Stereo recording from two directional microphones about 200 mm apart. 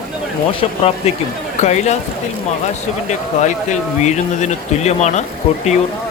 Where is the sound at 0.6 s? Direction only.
30° left (ahead or behind).